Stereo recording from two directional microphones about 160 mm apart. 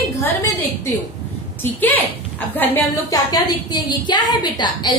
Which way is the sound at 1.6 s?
10° left (ahead or behind).